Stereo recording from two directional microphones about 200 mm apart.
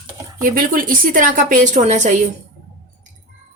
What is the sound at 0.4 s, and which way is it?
A woman's voice, 45° right (ahead or behind).